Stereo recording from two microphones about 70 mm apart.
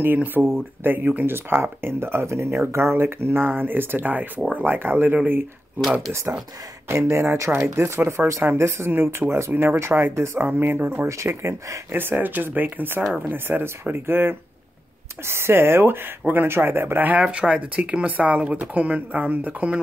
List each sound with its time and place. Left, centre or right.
0.0 s speech: right
4.6 s speech: right
6.9 s speech: right
9.5 s speech: right
9.8 s speech: right
11.9 s speech: right